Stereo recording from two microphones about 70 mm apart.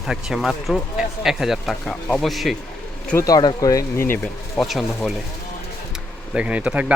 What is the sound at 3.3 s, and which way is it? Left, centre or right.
Speech, left.